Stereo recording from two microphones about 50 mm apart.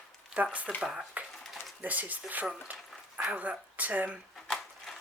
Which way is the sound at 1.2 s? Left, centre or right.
Right.